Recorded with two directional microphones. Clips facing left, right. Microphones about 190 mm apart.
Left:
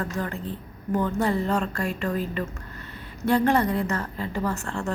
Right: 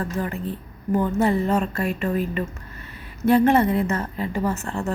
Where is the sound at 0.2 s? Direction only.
15° right (ahead or behind).